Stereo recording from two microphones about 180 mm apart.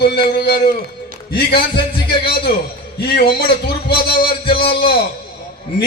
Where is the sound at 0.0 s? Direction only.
60° left (ahead or behind).